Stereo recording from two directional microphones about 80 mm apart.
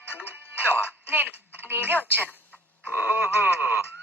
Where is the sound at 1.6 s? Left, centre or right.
Right.